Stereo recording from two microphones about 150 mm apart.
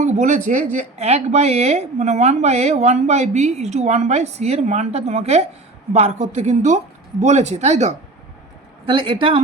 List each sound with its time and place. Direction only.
0.0 s speech: 55° right (ahead or behind)
8.9 s a woman's voice: 35° right (ahead or behind)